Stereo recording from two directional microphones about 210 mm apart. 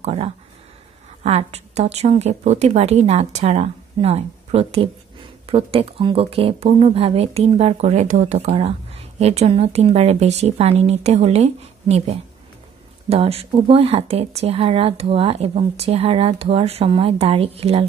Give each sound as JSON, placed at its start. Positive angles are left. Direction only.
{"t": 0.0, "sound": "a woman's voice", "side_deg": -30}